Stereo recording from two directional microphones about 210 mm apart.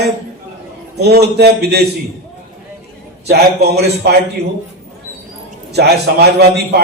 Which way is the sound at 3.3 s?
50° right (ahead or behind).